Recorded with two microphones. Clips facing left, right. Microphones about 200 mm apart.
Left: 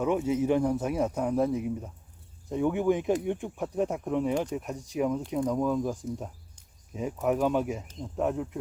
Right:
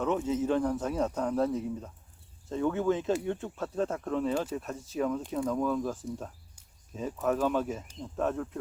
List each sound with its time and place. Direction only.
0.0 s speech: 10° left (ahead or behind)